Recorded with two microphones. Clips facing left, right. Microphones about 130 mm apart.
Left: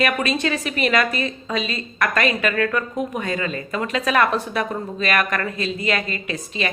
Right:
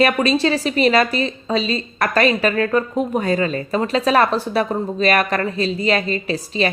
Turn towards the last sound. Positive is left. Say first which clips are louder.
# right 6 dB
turn(degrees=-35)  # may be behind; listen again after turning